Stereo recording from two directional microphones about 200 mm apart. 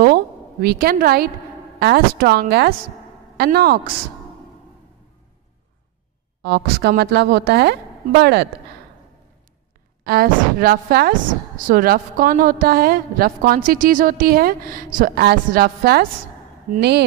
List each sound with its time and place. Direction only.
0.0 s a sound: 50° right (ahead or behind)
1.8 s a woman's voice: 55° right (ahead or behind)
6.4 s a woman's voice: 55° right (ahead or behind)
10.0 s a woman's voice: 50° right (ahead or behind)